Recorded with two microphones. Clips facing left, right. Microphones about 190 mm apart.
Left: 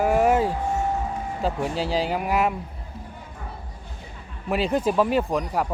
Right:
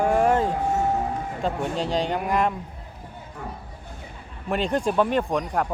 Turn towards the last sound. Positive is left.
turn(degrees=5)  # may be behind; listen again after turning